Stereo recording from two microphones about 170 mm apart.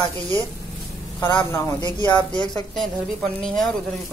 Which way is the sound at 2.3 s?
25° left (ahead or behind).